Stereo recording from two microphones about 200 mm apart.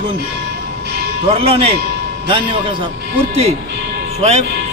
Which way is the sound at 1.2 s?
25° right (ahead or behind).